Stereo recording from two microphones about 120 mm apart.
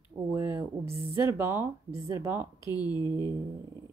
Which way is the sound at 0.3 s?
20° right (ahead or behind).